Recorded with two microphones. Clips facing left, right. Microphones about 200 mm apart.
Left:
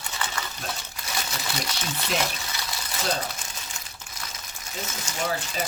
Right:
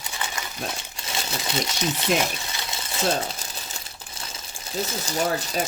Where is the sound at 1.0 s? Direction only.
20° right (ahead or behind).